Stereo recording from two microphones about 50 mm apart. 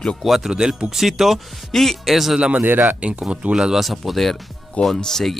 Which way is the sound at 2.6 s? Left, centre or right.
Right.